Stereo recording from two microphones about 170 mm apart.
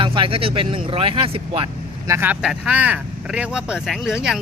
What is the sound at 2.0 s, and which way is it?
Speech, 15° right (ahead or behind).